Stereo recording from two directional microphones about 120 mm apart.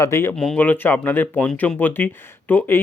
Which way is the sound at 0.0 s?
20° left (ahead or behind).